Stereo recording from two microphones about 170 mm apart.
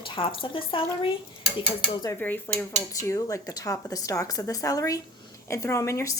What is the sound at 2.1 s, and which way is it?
A woman's voice, 10° left (ahead or behind).